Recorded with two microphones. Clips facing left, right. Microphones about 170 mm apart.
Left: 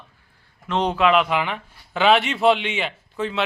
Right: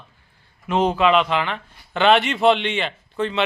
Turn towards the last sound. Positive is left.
turn(degrees=5)  # may be behind; listen again after turning